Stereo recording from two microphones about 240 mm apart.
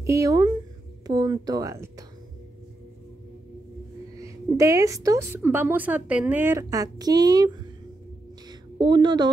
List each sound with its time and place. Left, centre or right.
0.0 s a woman's voice: centre
4.2 s a woman's voice: centre
8.5 s a sound: centre